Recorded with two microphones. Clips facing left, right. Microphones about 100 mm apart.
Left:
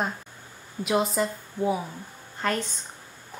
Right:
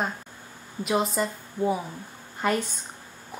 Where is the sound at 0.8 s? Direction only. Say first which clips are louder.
Left 1 dB; centre (ahead or behind).